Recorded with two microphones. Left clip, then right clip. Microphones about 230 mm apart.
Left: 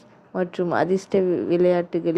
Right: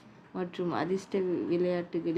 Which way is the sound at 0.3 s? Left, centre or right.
Left.